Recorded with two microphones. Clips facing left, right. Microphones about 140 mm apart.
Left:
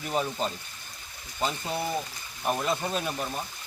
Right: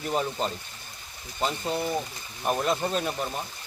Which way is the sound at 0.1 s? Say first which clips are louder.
Right 1 dB; centre (ahead or behind).